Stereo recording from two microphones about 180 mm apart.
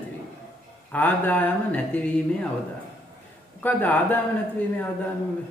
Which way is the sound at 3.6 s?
10° left (ahead or behind).